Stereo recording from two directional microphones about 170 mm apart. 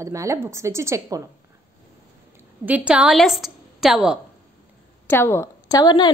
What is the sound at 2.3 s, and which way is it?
A woman's voice, 10° right (ahead or behind).